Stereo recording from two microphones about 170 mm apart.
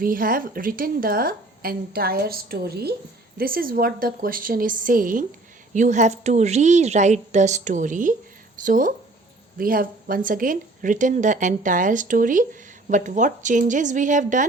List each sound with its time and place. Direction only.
0.0 s a woman's voice: 55° right (ahead or behind)